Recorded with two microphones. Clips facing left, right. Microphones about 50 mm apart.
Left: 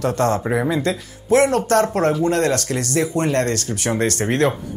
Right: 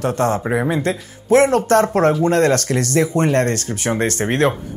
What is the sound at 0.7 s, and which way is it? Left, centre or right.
Speech, right.